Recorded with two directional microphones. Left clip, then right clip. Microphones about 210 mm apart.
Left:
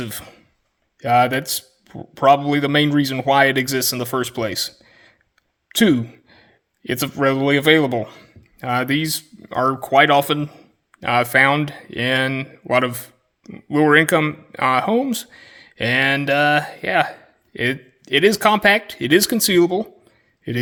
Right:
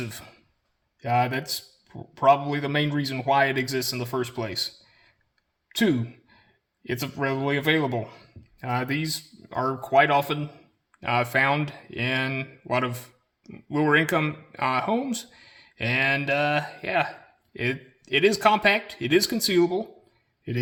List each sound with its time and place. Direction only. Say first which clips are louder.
0.0 s a man's voice: left 6 dB; 40° left (ahead or behind)